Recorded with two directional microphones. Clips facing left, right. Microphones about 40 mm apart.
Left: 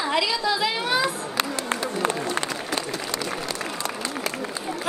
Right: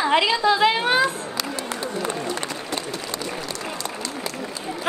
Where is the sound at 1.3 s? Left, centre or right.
Left.